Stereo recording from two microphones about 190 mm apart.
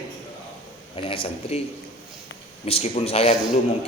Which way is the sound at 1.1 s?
30° left (ahead or behind).